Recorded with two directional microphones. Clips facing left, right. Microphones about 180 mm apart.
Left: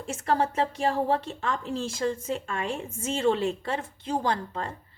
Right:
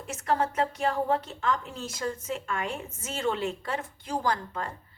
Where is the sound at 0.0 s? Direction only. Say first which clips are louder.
Left 2 dB; 30° left (ahead or behind).